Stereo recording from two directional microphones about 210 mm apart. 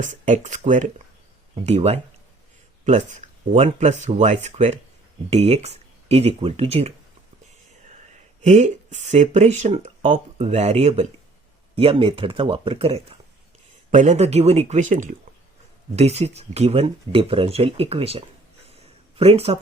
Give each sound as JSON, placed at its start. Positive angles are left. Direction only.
{"t": 0.0, "sound": "speech", "side_deg": -35}
{"t": 7.9, "sound": "a sound", "side_deg": -35}
{"t": 9.6, "sound": "speech", "side_deg": -35}